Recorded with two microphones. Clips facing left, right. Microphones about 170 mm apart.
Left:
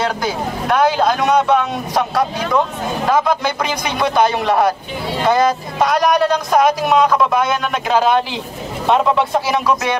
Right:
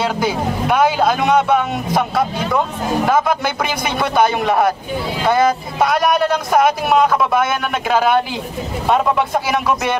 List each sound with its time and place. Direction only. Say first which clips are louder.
0.0 s speech: right 1 dB; 5° right (ahead or behind)